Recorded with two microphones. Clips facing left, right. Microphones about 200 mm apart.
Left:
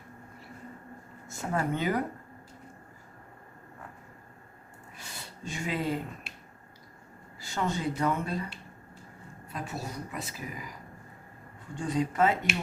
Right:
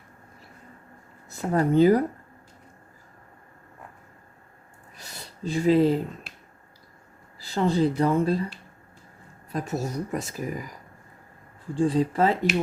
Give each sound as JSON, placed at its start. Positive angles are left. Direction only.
{"t": 1.3, "sound": "speech", "side_deg": -35}
{"t": 4.9, "sound": "a sound", "side_deg": -40}
{"t": 7.3, "sound": "speech", "side_deg": -35}
{"t": 9.5, "sound": "speech", "side_deg": -40}
{"t": 11.8, "sound": "speech", "side_deg": -30}